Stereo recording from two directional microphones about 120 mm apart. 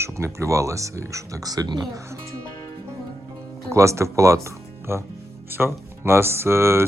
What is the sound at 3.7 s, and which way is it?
Speech, 25° right (ahead or behind).